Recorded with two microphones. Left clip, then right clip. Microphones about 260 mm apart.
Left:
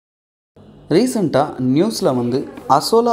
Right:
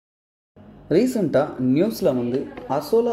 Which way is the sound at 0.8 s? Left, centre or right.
Centre.